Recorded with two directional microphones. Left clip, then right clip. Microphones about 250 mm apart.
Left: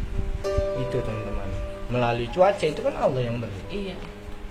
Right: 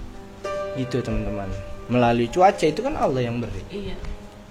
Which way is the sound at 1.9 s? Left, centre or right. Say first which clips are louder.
Right 5 dB; right.